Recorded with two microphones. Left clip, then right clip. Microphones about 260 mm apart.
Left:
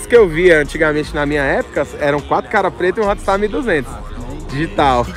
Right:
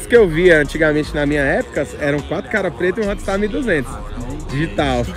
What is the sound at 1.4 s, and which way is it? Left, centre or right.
Speech, left.